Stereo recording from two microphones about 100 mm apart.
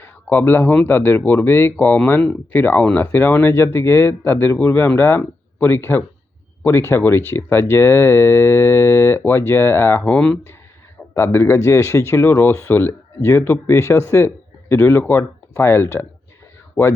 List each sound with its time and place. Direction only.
0.0 s a sound: 20° left (ahead or behind)
0.9 s speech: 20° left (ahead or behind)
11.1 s speech: 25° left (ahead or behind)